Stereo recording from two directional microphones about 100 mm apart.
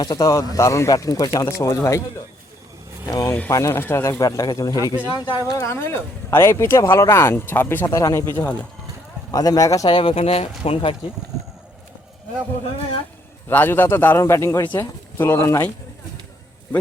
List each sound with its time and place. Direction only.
0.0 s speech: 35° left (ahead or behind)
3.1 s speech: 40° left (ahead or behind); by 4.2 s 25° left (ahead or behind)
4.2 s speech: 35° left (ahead or behind); by 7.9 s 20° left (ahead or behind)
7.9 s speech: 35° left (ahead or behind)
9.9 s speech: 60° left (ahead or behind)
13.5 s speech: 20° left (ahead or behind)
14.6 s speech: 20° left (ahead or behind)